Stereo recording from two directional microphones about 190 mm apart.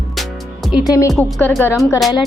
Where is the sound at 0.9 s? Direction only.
15° left (ahead or behind).